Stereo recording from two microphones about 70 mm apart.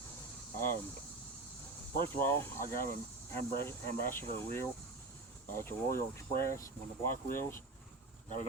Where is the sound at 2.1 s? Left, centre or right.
Left.